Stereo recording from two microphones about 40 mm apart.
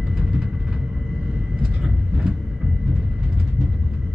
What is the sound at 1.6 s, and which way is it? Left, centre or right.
Vehicle, right.